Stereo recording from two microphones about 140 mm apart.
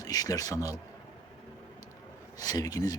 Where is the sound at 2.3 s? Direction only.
25° left (ahead or behind).